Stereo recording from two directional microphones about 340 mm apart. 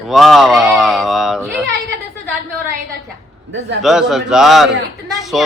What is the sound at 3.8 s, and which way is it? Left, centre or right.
A man's voice, centre.